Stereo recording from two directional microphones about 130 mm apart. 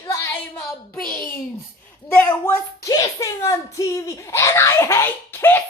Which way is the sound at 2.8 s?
25° left (ahead or behind).